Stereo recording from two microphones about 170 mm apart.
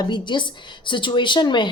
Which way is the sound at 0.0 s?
25° left (ahead or behind).